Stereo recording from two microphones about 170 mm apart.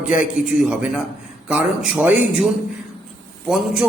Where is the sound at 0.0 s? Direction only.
5° right (ahead or behind).